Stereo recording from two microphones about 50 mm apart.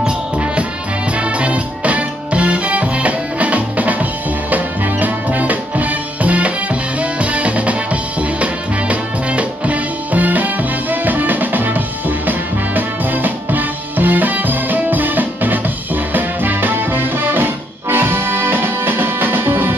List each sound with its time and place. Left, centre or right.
1.4 s music: right
5.0 s music: right
7.0 s drum kit: right
12.3 s music: right